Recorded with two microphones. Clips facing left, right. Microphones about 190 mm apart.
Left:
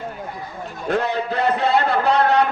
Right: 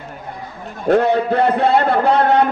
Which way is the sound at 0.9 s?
55° right (ahead or behind).